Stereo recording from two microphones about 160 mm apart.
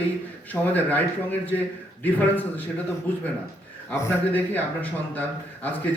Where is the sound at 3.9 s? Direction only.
15° left (ahead or behind).